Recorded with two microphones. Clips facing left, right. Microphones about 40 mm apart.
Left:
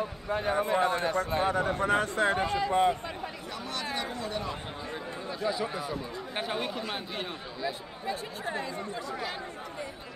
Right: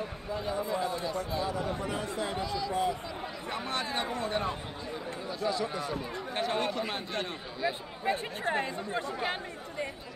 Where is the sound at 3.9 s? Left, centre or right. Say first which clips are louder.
Right 1 dB; right.